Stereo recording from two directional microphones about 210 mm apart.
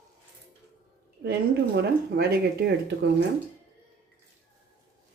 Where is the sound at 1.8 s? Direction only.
50° right (ahead or behind).